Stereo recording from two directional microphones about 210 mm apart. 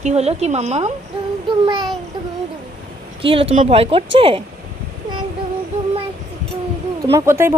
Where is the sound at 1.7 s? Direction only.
20° right (ahead or behind).